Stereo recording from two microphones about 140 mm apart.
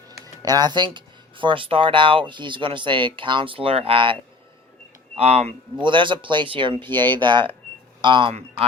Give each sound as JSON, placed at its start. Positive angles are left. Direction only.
{"t": 0.1, "sound": "speech", "side_deg": -25}
{"t": 5.7, "sound": "speech", "side_deg": -35}